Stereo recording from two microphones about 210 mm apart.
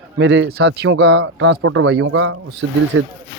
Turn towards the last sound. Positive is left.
turn(degrees=-70)  # may be behind; listen again after turning